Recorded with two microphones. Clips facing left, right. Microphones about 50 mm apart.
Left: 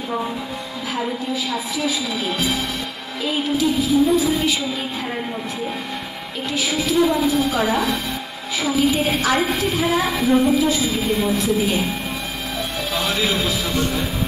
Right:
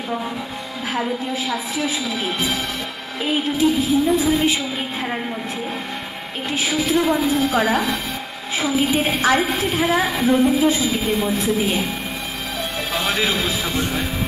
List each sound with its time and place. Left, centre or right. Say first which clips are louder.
3.5 s a woman's voice: left 1 dB; right
6.5 s a woman's voice: right 1 dB; right
12.9 s music: right 1 dB; right
13.4 s a woman's voice: left 1 dB; right